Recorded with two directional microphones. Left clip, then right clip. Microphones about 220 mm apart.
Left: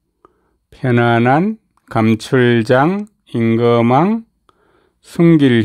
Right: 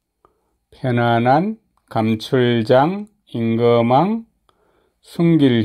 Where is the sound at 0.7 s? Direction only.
25° left (ahead or behind).